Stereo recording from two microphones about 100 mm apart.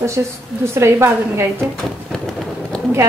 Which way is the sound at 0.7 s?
25° right (ahead or behind).